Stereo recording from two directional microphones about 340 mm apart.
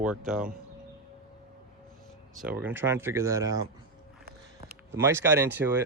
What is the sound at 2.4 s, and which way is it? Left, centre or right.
Speech, centre.